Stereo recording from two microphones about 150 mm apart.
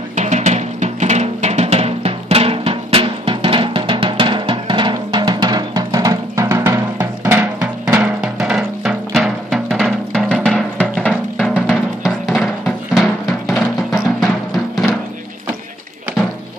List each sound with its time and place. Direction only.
0.1 s music: 50° right (ahead or behind); by 11.1 s 5° left (ahead or behind)
11.3 s music: 5° right (ahead or behind)